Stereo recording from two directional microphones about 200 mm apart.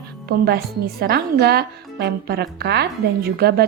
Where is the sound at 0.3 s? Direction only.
50° right (ahead or behind).